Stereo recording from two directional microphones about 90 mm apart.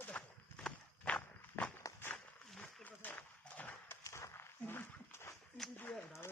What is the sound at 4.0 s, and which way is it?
Dog, 35° left (ahead or behind).